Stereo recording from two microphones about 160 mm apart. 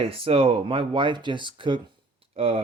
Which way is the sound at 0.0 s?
35° right (ahead or behind).